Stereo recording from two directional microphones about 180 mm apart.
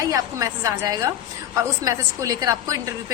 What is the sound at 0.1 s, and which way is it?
A woman's voice, 20° right (ahead or behind).